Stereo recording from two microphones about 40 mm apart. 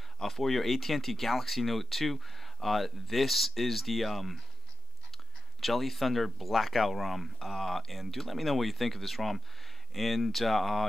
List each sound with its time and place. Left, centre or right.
0.2 s speech: centre